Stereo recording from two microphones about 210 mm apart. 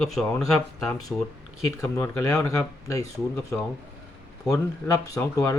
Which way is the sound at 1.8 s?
15° left (ahead or behind).